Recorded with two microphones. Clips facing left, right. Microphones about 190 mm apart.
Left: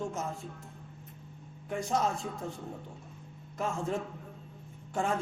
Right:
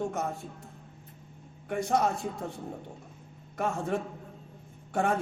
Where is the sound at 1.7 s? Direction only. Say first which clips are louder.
Right 3 dB; 65° right (ahead or behind).